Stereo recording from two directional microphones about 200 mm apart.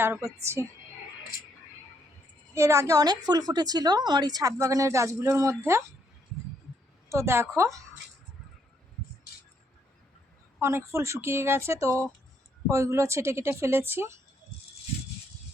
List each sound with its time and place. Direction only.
0.0 s a woman's voice: 10° right (ahead or behind)
2.6 s a woman's voice: 15° right (ahead or behind)
7.1 s a woman's voice: 15° right (ahead or behind)
10.6 s a woman's voice: 15° right (ahead or behind)